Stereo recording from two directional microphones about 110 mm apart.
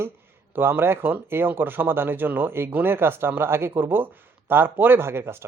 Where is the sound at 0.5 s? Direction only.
20° right (ahead or behind).